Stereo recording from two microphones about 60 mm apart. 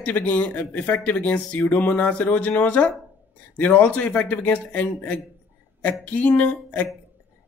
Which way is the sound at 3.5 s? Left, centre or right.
Left.